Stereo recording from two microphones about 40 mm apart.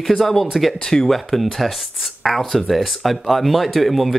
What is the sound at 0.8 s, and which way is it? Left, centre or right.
Speech, centre.